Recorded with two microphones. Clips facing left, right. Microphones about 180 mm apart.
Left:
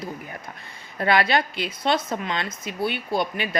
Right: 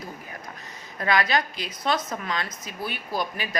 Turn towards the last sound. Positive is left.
turn(degrees=25)  # may be behind; listen again after turning